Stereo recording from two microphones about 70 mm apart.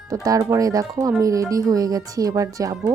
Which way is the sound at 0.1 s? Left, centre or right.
Right.